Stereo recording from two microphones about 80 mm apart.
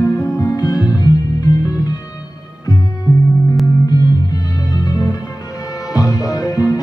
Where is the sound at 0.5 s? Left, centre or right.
Left.